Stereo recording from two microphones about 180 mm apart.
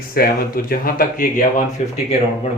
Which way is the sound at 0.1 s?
55° left (ahead or behind).